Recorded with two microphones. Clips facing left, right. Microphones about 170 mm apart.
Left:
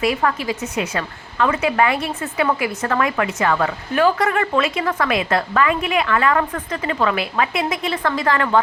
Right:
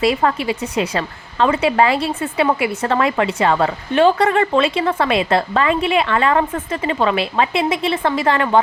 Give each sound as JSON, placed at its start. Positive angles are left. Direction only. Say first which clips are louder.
{"t": 0.0, "sound": "a woman's voice", "louder": "right 3 dB", "side_deg": -30}